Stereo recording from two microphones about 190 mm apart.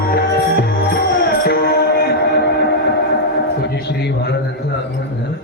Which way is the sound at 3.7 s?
60° left (ahead or behind).